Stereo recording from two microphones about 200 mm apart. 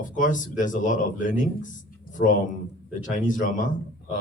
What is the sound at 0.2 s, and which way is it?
Speech, 40° left (ahead or behind).